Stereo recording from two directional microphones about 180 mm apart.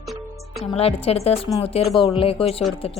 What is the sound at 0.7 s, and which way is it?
A woman's voice, 35° left (ahead or behind).